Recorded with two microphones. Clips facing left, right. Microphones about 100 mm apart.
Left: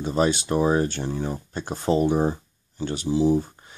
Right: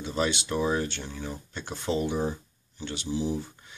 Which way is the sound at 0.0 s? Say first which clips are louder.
Left 6 dB; 40° left (ahead or behind).